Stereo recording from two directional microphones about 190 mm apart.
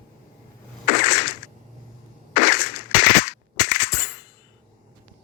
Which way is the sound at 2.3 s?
50° left (ahead or behind).